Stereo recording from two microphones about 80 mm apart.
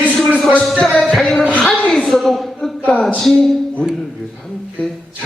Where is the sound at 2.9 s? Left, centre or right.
Centre.